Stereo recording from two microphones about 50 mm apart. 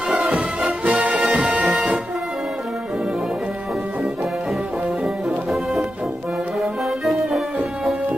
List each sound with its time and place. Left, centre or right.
0.1 s music: right
1.6 s music: centre
5.0 s music: centre
6.6 s brass instrument: centre